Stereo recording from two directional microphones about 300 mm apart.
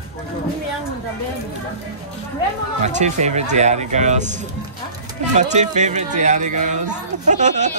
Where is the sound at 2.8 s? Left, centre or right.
Right.